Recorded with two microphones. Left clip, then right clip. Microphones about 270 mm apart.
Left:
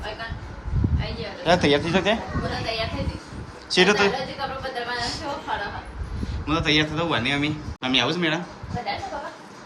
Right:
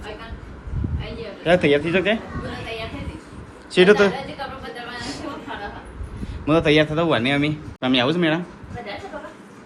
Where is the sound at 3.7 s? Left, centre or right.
Centre.